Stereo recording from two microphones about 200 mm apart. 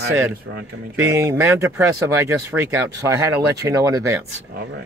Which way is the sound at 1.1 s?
15° right (ahead or behind).